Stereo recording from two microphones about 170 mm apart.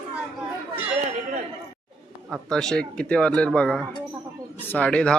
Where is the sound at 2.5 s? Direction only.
5° left (ahead or behind).